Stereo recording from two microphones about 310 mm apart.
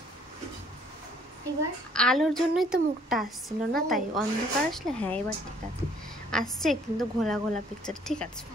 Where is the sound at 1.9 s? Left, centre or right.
Centre.